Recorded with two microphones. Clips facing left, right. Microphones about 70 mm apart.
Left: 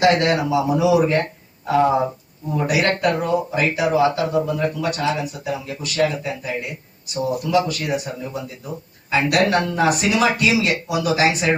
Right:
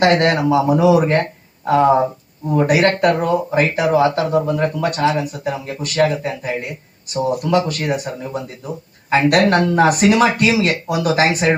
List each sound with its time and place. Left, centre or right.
0.0 s speech: right